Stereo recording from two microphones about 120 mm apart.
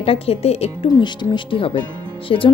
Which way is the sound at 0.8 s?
40° left (ahead or behind).